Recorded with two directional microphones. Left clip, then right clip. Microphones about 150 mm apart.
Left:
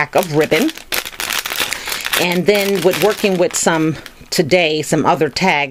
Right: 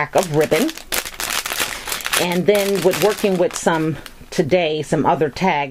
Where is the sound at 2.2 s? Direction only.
30° left (ahead or behind).